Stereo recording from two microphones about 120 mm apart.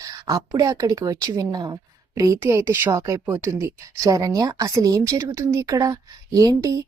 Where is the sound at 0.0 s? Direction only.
30° right (ahead or behind).